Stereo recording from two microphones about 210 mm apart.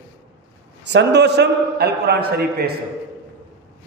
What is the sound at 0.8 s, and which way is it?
A man's voice, 55° right (ahead or behind).